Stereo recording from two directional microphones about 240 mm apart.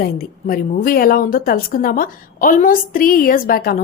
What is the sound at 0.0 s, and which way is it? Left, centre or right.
A woman's voice, left.